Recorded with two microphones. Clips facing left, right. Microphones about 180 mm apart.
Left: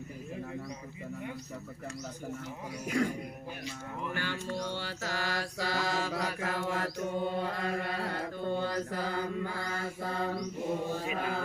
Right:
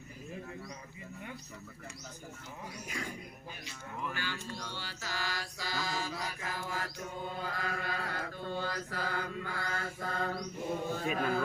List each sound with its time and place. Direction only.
2.8 s music: 60° left (ahead or behind)
4.1 s music: 55° left (ahead or behind)
4.7 s mantra: 60° left (ahead or behind)
7.3 s mantra: 25° left (ahead or behind); by 11.0 s 5° left (ahead or behind)
11.0 s chant: 20° left (ahead or behind)